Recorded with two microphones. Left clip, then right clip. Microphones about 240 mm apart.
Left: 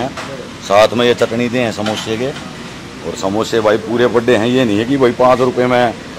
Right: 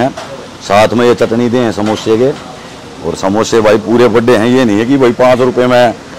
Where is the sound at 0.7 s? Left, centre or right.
Right.